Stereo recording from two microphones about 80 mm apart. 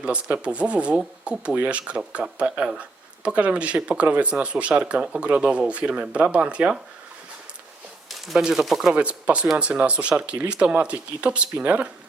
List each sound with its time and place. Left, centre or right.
0.0 s speech: centre
8.3 s speech: centre